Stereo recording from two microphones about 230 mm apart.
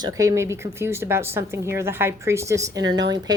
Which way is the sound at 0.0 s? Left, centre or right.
Centre.